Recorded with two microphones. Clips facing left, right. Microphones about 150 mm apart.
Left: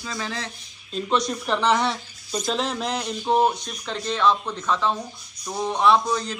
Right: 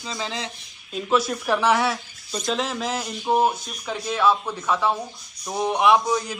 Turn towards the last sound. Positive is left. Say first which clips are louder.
# right 1 dB
turn(degrees=-10)  # may be behind; listen again after turning